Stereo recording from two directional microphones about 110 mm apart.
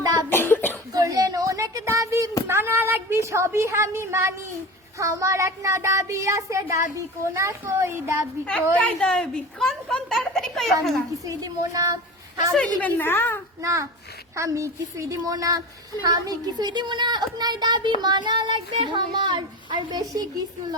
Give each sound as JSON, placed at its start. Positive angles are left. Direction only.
{"t": 0.0, "sound": "cough", "side_deg": -35}
{"t": 0.3, "sound": "cough", "side_deg": 20}
{"t": 0.9, "sound": "a sound", "side_deg": -35}
{"t": 8.8, "sound": "a child's voice", "side_deg": 5}
{"t": 11.3, "sound": "a child's voice", "side_deg": -35}
{"t": 12.5, "sound": "a woman's voice", "side_deg": 15}
{"t": 13.6, "sound": "a sound", "side_deg": -30}
{"t": 16.0, "sound": "a child's voice", "side_deg": -40}